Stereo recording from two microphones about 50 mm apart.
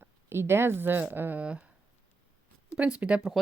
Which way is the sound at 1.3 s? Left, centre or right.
Right.